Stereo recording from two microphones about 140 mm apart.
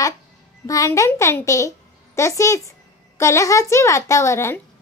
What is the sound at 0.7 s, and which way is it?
A woman's voice, 25° left (ahead or behind).